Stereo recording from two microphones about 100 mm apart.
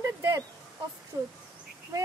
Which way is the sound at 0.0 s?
30° right (ahead or behind).